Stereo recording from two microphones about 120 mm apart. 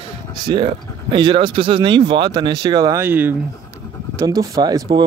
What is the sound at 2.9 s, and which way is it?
Speech, 15° right (ahead or behind).